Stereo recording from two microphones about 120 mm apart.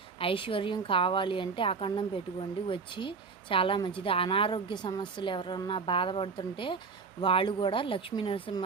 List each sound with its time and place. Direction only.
0.2 s a woman's voice: 45° left (ahead or behind)